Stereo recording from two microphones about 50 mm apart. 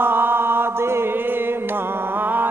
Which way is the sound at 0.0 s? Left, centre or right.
Right.